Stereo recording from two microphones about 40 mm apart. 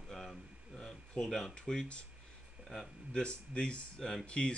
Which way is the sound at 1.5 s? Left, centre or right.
Left.